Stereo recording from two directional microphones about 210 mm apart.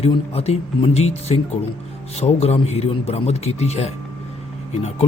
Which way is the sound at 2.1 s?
30° left (ahead or behind).